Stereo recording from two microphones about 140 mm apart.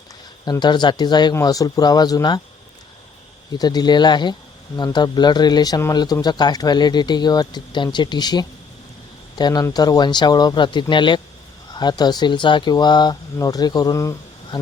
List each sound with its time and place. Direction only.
0.6 s speech: 35° left (ahead or behind)
3.5 s speech: 30° left (ahead or behind)